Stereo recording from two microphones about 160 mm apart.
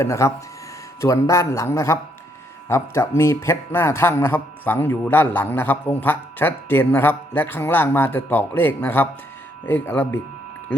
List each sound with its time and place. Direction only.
0.0 s a man's voice: 20° left (ahead or behind)